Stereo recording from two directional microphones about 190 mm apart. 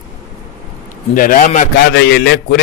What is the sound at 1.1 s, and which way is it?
Speech, 45° left (ahead or behind).